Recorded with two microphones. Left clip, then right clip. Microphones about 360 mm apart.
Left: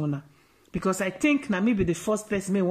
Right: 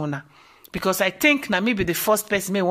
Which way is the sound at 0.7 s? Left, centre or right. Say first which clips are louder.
Right 6 dB; centre.